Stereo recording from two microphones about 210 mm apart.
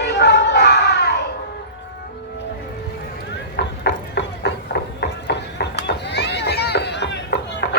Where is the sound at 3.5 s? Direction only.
55° left (ahead or behind).